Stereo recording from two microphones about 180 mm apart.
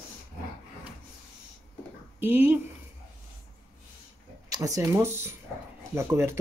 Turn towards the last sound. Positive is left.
turn(degrees=-15)  # may be behind; listen again after turning